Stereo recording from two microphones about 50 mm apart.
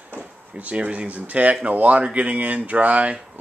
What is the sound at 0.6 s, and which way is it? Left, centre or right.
Speech, right.